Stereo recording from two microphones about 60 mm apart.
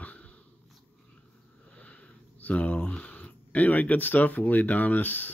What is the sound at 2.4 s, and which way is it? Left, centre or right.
Speech, left.